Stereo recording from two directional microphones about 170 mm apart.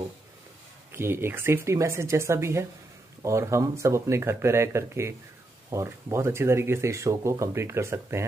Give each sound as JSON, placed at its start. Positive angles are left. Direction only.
{"t": 0.9, "sound": "speech", "side_deg": -15}